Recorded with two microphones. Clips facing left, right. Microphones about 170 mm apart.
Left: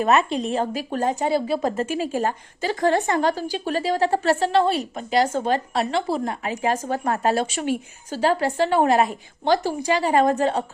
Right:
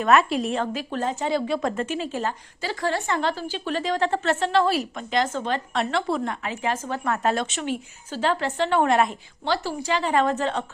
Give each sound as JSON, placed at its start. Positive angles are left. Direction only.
{"t": 0.0, "sound": "speech", "side_deg": 35}
{"t": 0.3, "sound": "speech", "side_deg": 0}
{"t": 0.5, "sound": "a woman's voice", "side_deg": 40}
{"t": 9.4, "sound": "a woman's voice", "side_deg": 45}